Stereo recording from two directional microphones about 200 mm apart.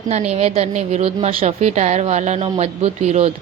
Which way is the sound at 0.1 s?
30° right (ahead or behind).